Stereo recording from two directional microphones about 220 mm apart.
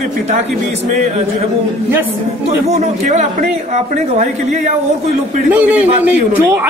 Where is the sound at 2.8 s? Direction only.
30° right (ahead or behind).